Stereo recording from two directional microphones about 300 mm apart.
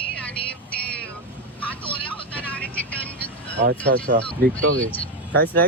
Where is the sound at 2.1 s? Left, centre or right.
Centre.